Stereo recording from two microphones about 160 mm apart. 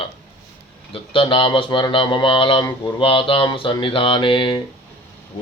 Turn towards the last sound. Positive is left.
turn(degrees=30)  # may be behind; listen again after turning